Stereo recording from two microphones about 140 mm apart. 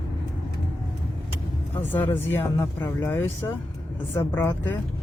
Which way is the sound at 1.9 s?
15° left (ahead or behind).